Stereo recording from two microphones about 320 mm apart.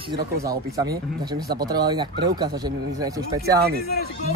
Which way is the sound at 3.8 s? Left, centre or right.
Left.